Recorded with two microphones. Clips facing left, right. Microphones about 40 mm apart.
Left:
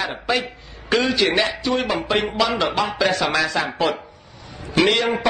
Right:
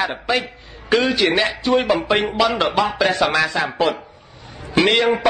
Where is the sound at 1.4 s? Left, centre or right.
Right.